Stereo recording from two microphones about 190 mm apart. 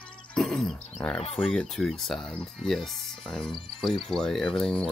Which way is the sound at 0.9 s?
5° left (ahead or behind).